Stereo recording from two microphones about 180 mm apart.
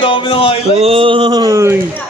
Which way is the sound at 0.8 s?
35° right (ahead or behind).